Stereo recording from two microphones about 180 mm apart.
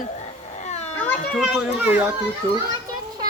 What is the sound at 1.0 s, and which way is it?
Speech, 10° left (ahead or behind).